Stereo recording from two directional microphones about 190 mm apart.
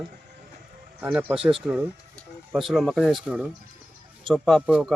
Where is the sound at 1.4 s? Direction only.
30° right (ahead or behind).